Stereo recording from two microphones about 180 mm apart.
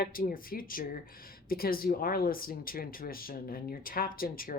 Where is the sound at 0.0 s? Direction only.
55° left (ahead or behind).